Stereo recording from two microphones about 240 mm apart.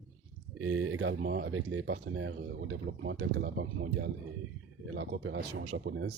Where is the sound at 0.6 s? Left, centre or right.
Right.